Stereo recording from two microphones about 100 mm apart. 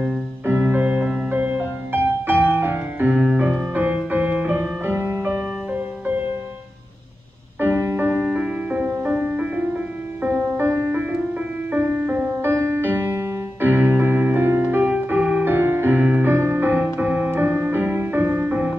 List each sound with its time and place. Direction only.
0.5 s music: 20° right (ahead or behind)
7.6 s music: 20° right (ahead or behind)
11.0 s music: 15° right (ahead or behind)
12.4 s music: 30° right (ahead or behind)